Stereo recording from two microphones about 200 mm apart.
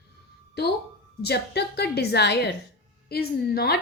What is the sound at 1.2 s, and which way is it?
A woman's voice, 55° left (ahead or behind).